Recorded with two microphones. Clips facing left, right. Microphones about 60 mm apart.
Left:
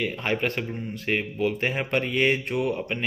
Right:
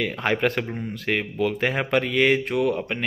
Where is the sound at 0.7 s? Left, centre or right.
Right.